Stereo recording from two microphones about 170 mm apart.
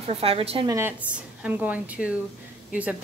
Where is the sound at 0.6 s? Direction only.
15° right (ahead or behind).